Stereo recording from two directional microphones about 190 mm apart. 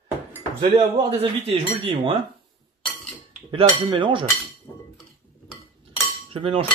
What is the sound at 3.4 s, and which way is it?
Speech, 25° right (ahead or behind).